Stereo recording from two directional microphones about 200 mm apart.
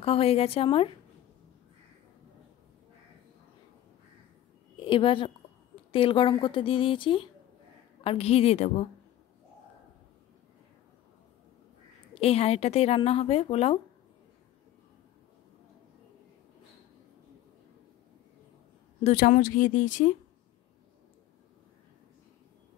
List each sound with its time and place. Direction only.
0.0 s a woman's voice: 30° left (ahead or behind)
4.7 s a woman's voice: 25° left (ahead or behind)
12.1 s speech: 30° left (ahead or behind)
19.0 s speech: 40° left (ahead or behind)